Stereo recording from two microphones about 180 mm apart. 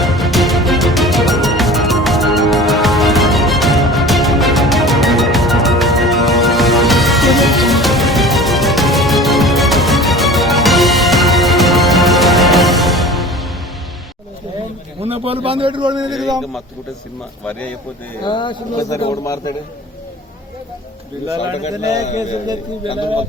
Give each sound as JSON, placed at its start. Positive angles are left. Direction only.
{"t": 0.0, "sound": "music", "side_deg": 0}
{"t": 15.0, "sound": "a man's voice", "side_deg": -35}
{"t": 16.4, "sound": "speech", "side_deg": 0}
{"t": 18.2, "sound": "speech", "side_deg": 25}
{"t": 21.6, "sound": "a man's voice", "side_deg": 40}